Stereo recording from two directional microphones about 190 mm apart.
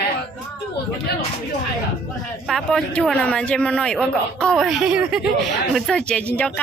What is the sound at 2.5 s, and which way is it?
Speech, centre (ahead or behind).